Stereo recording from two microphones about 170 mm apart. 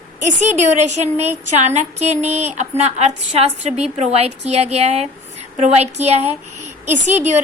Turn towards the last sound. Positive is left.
turn(degrees=-45)  # may be behind; listen again after turning